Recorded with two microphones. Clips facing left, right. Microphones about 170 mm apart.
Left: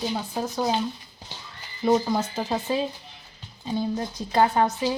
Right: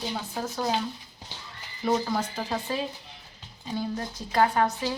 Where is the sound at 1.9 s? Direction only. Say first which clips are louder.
Left 4 dB; 20° left (ahead or behind).